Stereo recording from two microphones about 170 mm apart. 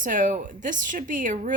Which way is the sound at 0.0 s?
50° right (ahead or behind).